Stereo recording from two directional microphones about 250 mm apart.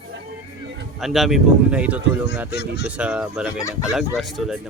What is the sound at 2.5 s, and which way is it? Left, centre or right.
Speech, left.